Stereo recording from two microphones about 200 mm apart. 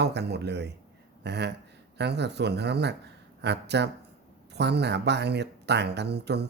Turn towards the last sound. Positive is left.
turn(degrees=-55)  # may be behind; listen again after turning